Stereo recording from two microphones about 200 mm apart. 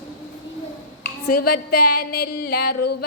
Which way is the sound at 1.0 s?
50° left (ahead or behind).